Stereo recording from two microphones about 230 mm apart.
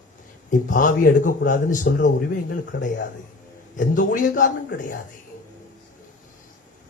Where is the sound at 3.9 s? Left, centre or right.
Left.